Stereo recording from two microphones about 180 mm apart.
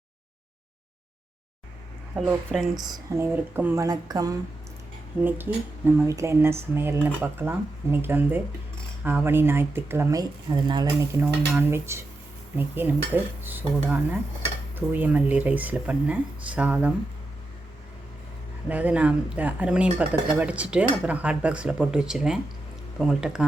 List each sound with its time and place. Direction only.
2.1 s speech: centre (ahead or behind)
2.8 s speech: 15° right (ahead or behind)
11.5 s speech: 15° right (ahead or behind)
18.7 s speech: 10° right (ahead or behind)